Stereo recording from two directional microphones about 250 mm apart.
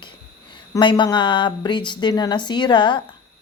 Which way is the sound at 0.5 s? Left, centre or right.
Centre.